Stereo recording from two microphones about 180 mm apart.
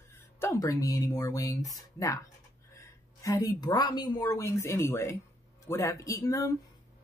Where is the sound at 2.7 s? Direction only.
15° left (ahead or behind).